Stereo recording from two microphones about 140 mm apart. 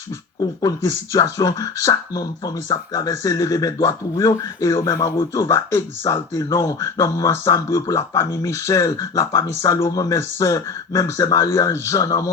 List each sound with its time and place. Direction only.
0.6 s speech: 25° left (ahead or behind)